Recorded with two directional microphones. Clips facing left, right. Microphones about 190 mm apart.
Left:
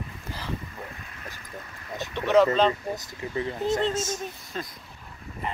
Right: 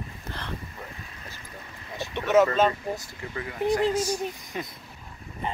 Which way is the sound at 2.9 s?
20° left (ahead or behind).